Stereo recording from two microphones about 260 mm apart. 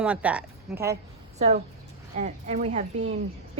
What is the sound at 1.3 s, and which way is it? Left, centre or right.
A woman's voice, right.